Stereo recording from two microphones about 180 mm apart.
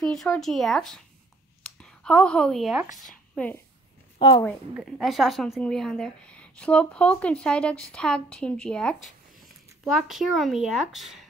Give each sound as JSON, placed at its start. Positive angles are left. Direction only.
{"t": 0.0, "sound": "a woman's voice", "side_deg": 5}
{"t": 4.2, "sound": "a woman's voice", "side_deg": 25}
{"t": 4.8, "sound": "a woman's voice", "side_deg": 0}